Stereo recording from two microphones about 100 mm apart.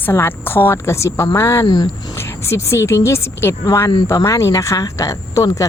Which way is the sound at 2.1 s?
25° left (ahead or behind).